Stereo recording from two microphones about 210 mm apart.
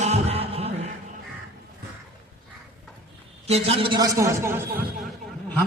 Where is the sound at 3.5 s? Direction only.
30° right (ahead or behind); by 4.8 s 10° right (ahead or behind).